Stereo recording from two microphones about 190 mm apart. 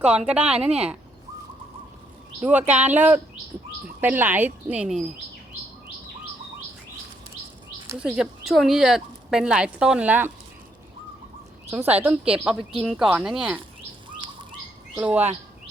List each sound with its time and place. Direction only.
0.0 s speech: 5° right (ahead or behind)
2.4 s speech: 10° right (ahead or behind)
7.9 s speech: 5° right (ahead or behind)
11.7 s speech: 10° right (ahead or behind)
14.1 s bird: 25° right (ahead or behind)
14.9 s speech: 10° right (ahead or behind)